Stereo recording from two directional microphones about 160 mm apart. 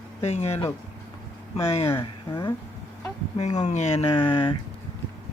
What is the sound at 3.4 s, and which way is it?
Speech, 45° left (ahead or behind).